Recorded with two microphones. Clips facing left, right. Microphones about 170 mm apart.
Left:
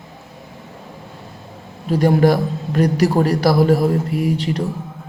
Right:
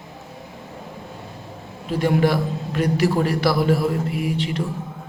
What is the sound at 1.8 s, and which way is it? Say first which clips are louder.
A man's voice: left 5 dB; 40° left (ahead or behind).